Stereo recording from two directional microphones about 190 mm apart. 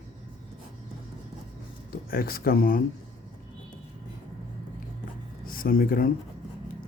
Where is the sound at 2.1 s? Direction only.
50° left (ahead or behind).